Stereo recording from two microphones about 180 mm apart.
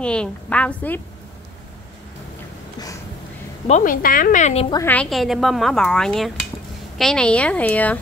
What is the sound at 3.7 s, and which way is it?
A woman's voice, 45° left (ahead or behind).